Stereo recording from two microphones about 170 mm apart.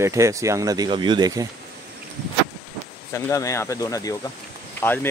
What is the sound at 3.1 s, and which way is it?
Speech, 20° left (ahead or behind).